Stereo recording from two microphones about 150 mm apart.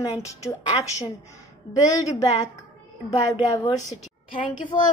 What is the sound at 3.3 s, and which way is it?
Speech, 30° left (ahead or behind).